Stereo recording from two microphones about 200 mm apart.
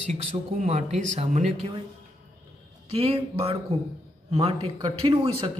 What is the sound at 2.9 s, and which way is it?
Speech, 30° right (ahead or behind).